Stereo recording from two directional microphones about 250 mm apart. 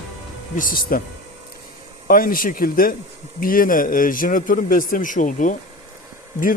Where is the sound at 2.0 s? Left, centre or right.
Left.